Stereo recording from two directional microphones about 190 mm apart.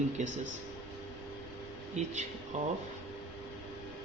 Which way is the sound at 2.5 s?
35° right (ahead or behind).